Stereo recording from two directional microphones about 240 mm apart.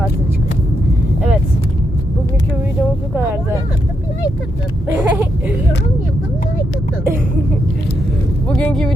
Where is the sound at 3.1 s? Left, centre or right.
Centre.